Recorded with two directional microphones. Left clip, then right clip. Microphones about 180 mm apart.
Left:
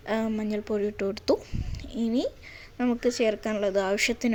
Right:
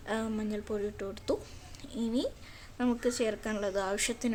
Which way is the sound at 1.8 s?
20° left (ahead or behind).